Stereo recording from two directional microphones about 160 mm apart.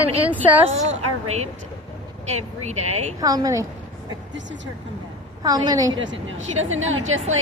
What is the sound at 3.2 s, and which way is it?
Speech, 25° right (ahead or behind).